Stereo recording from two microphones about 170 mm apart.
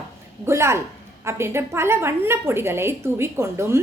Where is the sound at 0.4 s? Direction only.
15° right (ahead or behind).